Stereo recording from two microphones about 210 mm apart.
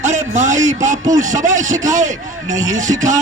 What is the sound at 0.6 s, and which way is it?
Speech, 15° right (ahead or behind).